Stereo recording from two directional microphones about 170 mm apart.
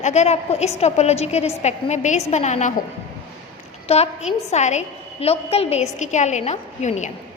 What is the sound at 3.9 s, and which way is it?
A woman's voice, 40° left (ahead or behind).